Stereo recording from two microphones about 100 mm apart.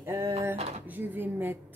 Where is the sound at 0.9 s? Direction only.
20° right (ahead or behind).